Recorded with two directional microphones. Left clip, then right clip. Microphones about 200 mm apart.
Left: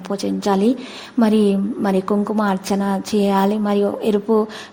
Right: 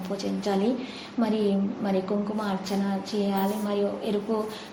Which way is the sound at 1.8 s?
50° left (ahead or behind).